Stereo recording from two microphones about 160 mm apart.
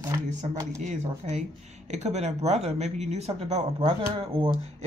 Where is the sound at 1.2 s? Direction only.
45° right (ahead or behind).